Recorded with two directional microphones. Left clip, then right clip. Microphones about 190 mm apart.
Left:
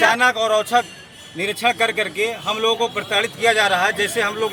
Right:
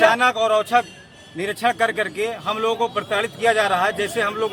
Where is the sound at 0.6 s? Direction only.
5° right (ahead or behind).